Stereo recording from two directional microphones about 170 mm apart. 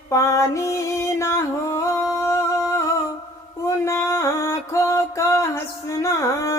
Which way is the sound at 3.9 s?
15° left (ahead or behind).